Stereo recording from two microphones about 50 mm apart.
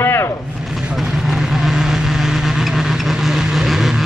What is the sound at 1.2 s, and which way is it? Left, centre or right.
Vehicle, centre.